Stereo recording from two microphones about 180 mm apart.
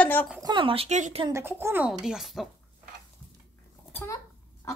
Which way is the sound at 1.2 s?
15° right (ahead or behind).